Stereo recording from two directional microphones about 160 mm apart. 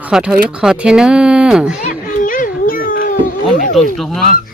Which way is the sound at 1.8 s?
55° left (ahead or behind).